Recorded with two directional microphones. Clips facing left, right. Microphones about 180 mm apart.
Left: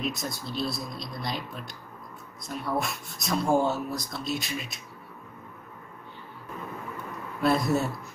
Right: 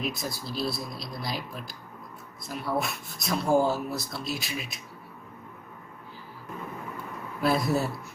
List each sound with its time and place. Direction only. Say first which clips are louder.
0.0 s speech: even; centre (ahead or behind)
7.4 s speech: left 1 dB; centre (ahead or behind)